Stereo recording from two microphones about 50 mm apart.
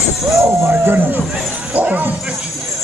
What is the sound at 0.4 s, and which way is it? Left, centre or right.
Music, right.